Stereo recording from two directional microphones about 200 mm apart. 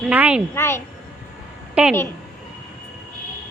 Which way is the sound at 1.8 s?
5° right (ahead or behind).